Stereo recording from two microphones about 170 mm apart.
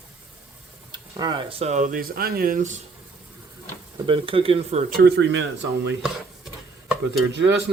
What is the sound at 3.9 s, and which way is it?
Speech, 30° right (ahead or behind).